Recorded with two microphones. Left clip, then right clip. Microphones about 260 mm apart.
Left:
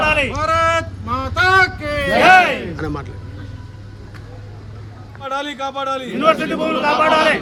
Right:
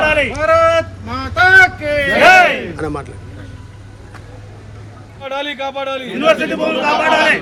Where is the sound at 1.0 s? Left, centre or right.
Left.